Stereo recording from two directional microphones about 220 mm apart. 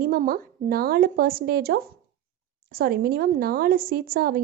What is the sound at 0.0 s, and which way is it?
A woman's voice, 40° right (ahead or behind).